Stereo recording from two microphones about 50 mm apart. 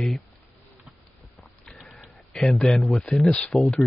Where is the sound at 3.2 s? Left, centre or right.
Centre.